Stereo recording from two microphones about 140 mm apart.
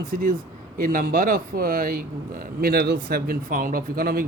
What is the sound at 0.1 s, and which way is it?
Speech, 80° right.